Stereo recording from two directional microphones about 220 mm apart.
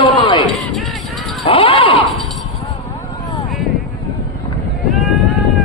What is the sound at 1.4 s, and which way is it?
Speech, 25° left (ahead or behind).